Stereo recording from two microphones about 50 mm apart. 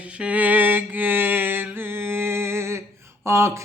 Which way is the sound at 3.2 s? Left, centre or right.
Right.